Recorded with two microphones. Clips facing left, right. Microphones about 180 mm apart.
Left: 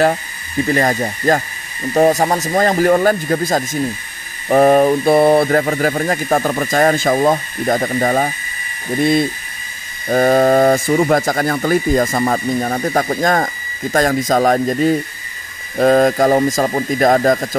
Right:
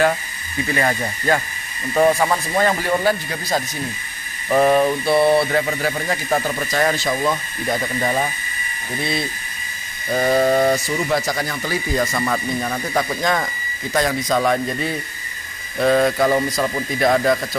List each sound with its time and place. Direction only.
0.7 s speech: 40° left (ahead or behind)
10.0 s speech: 50° left (ahead or behind)